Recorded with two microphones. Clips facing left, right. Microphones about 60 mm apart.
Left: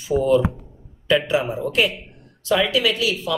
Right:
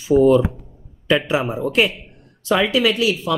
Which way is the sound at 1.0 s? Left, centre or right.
Centre.